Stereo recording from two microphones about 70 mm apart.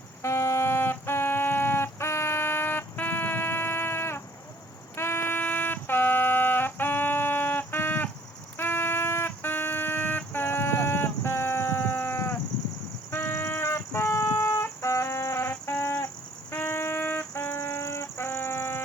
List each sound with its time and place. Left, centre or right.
0.2 s music: left
13.1 s a sound: left
16.5 s music: left